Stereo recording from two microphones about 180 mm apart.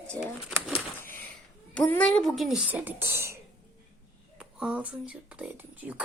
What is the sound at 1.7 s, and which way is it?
Speech, 10° left (ahead or behind).